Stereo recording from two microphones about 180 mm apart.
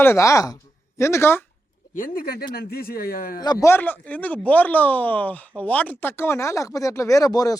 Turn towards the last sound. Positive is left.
turn(degrees=20)  # may be behind; listen again after turning